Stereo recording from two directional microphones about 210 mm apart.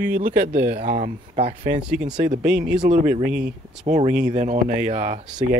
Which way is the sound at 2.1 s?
35° right (ahead or behind).